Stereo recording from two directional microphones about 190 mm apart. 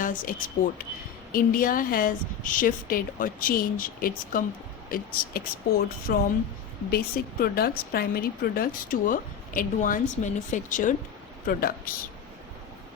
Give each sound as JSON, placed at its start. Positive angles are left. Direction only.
{"t": 0.0, "sound": "a woman's voice", "side_deg": 45}